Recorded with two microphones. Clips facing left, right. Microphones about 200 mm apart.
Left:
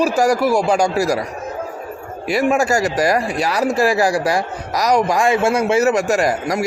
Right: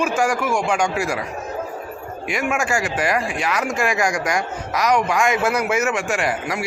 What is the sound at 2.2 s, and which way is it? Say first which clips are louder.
Speech: left 7 dB; 35° left (ahead or behind).